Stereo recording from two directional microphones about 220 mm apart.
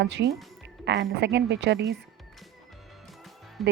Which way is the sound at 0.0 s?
50° right (ahead or behind).